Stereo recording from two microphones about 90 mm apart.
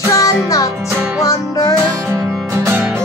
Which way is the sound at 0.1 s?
40° left (ahead or behind).